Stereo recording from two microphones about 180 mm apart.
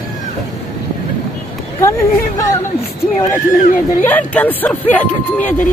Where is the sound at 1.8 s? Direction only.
15° left (ahead or behind).